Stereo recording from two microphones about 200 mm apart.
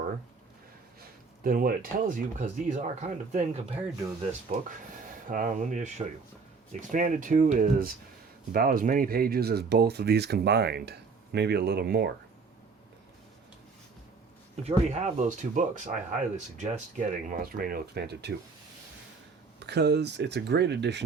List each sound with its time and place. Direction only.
1.5 s speech: 45° right (ahead or behind)
14.5 s speech: 30° right (ahead or behind); by 18.3 s 55° right (ahead or behind)
19.5 s speech: 55° right (ahead or behind)